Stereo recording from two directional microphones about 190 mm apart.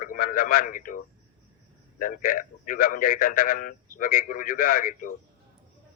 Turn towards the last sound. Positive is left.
turn(degrees=45)  # may be behind; listen again after turning